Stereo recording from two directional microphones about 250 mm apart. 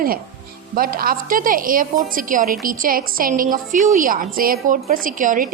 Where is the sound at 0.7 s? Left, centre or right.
Right.